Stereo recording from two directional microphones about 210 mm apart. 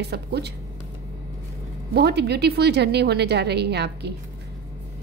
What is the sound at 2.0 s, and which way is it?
A woman's voice, 50° right (ahead or behind).